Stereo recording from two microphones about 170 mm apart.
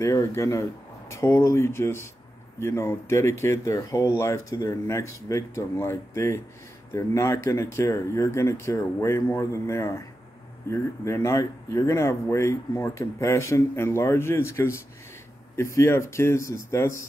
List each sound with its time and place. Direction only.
0.0 s speech: 20° left (ahead or behind)